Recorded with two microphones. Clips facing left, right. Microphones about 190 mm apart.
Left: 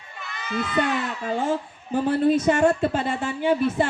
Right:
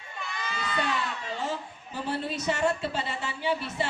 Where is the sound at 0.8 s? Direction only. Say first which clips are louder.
Left 6 dB; 50° left (ahead or behind).